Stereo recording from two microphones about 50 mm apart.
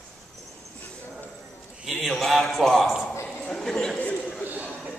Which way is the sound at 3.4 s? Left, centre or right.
Centre.